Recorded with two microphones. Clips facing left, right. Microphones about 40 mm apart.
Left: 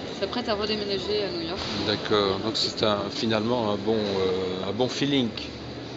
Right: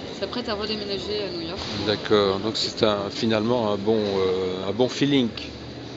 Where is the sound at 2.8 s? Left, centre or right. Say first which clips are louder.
Right 3 dB; right.